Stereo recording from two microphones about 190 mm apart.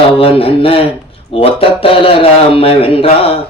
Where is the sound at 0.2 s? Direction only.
30° left (ahead or behind).